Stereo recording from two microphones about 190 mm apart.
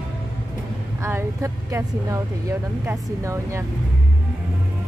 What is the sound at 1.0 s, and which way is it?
Speech, 15° right (ahead or behind).